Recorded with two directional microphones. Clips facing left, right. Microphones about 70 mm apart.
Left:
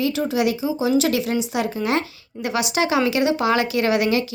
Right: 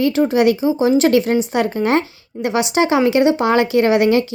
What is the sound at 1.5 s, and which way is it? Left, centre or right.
Speech, right.